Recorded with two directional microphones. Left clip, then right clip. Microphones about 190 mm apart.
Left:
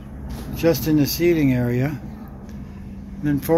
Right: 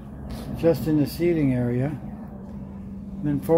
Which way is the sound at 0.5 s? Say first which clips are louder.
Left 2 dB; 5° left (ahead or behind).